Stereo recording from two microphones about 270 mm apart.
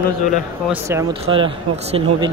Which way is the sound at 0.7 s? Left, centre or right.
Centre.